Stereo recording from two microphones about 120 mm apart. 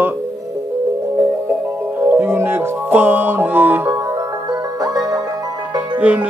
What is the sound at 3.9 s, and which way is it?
Music, 30° right (ahead or behind).